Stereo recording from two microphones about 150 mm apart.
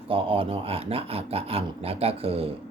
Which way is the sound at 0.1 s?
35° right (ahead or behind).